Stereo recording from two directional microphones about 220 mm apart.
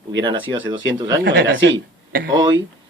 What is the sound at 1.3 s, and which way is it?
A man's voice, 55° right (ahead or behind).